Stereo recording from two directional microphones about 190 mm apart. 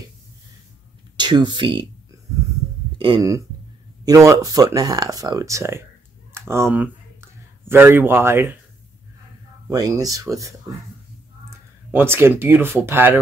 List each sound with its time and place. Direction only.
1.1 s speech: 25° right (ahead or behind)
3.0 s speech: 20° right (ahead or behind)
9.7 s speech: 20° right (ahead or behind)
11.5 s speech: 10° right (ahead or behind)